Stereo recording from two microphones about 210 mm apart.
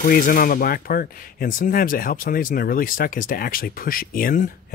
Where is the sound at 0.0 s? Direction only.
40° left (ahead or behind).